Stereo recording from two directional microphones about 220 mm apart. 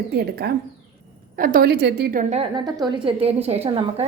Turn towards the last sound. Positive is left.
turn(degrees=-25)  # may be behind; listen again after turning